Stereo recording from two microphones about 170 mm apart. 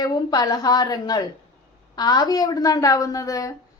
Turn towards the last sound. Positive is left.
turn(degrees=20)  # may be behind; listen again after turning